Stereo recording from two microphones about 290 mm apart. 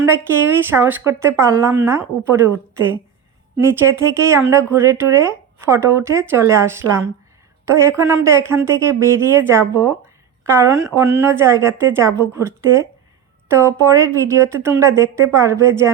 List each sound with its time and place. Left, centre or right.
0.0 s speech: centre